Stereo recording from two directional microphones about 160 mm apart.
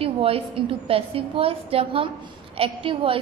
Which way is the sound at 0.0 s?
35° right (ahead or behind).